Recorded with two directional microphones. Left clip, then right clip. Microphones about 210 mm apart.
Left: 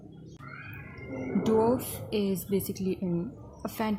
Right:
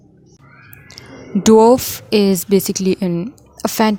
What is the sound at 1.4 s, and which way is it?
A woman's voice, 50° right (ahead or behind).